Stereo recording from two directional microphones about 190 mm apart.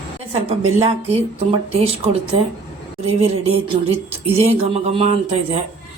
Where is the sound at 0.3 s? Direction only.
30° right (ahead or behind).